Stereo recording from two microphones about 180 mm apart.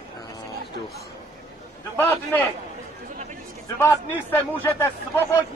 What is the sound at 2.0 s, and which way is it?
Speech, 10° left (ahead or behind).